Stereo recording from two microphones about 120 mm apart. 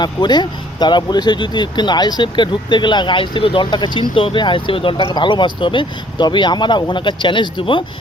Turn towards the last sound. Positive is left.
turn(degrees=40)  # may be behind; listen again after turning